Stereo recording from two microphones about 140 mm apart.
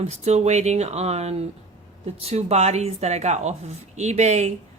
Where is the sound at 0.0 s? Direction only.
50° right (ahead or behind).